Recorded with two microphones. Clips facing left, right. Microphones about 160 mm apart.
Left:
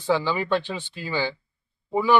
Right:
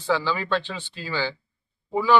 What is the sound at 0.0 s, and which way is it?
A man's voice, 15° left (ahead or behind).